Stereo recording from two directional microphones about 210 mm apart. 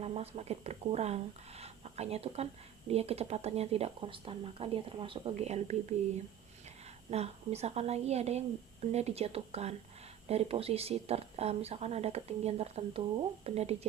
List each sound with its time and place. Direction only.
0.0 s speech: 30° right (ahead or behind)
7.1 s a woman's voice: 30° right (ahead or behind)